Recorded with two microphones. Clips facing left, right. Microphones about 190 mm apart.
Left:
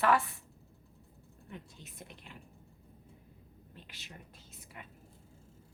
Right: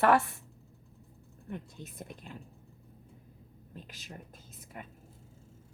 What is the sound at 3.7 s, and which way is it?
Speech, 40° right (ahead or behind).